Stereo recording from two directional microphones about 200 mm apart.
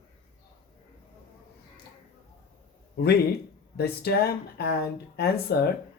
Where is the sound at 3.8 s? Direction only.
50° left (ahead or behind).